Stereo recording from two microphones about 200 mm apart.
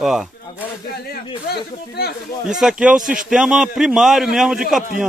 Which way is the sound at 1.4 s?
55° left (ahead or behind).